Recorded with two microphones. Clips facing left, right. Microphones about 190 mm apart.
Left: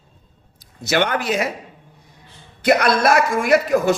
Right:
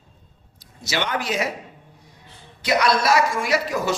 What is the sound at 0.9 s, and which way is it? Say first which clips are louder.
Speech: left 6 dB; 55° left (ahead or behind).